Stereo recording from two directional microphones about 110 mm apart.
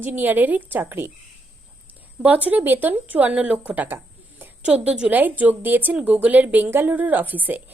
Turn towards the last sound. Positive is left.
turn(degrees=-15)  # may be behind; listen again after turning